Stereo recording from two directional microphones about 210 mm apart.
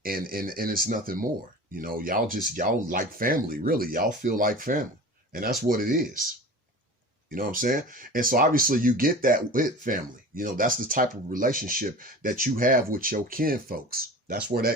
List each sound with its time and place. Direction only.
0.0 s speech: 45° right (ahead or behind)
7.3 s speech: 40° right (ahead or behind)